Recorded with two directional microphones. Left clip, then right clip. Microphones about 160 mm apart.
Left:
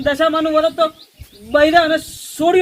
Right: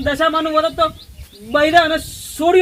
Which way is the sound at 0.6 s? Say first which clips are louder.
Left 1 dB; 15° left (ahead or behind).